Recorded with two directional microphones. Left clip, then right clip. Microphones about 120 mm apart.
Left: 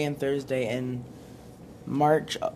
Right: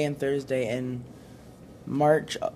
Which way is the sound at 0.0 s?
40° right (ahead or behind).